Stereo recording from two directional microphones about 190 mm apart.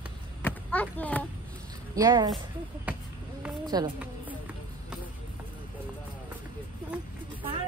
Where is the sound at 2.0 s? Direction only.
20° right (ahead or behind).